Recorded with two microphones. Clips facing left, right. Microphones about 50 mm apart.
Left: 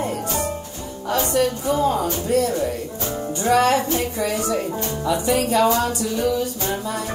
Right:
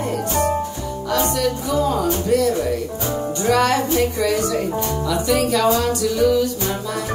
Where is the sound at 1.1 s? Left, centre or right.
Left.